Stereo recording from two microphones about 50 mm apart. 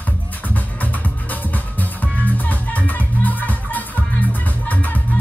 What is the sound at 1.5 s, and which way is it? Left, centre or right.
Music, left.